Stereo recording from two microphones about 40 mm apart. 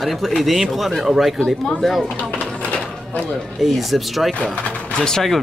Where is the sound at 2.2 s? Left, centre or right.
Left.